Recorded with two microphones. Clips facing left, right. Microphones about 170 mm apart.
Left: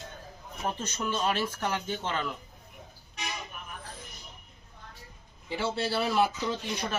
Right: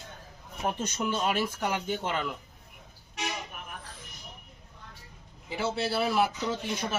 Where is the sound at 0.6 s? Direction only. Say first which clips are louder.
Right 2 dB; 10° right (ahead or behind).